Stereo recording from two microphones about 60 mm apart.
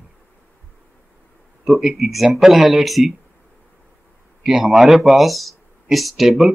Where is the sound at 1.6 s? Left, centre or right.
Centre.